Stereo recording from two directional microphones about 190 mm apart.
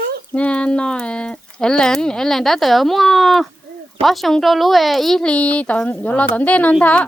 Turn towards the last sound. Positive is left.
turn(degrees=5)  # may be behind; listen again after turning